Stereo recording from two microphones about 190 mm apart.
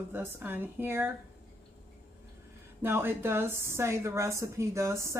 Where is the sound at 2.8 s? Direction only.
10° right (ahead or behind).